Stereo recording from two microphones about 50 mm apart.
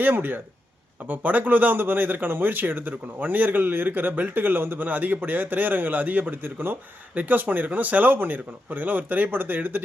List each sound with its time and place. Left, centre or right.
0.0 s speech: right